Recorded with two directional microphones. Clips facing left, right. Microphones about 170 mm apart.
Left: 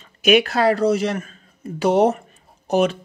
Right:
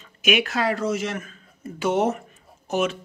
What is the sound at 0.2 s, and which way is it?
Speech, 35° left (ahead or behind).